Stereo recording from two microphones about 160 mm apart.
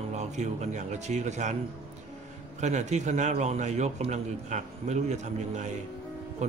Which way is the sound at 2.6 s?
50° right (ahead or behind).